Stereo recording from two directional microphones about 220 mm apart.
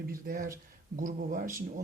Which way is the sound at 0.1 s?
40° right (ahead or behind).